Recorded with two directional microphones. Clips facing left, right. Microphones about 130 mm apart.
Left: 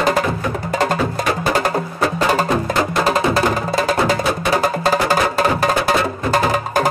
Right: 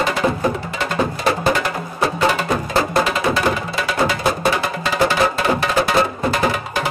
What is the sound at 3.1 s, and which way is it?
Music, 40° left (ahead or behind).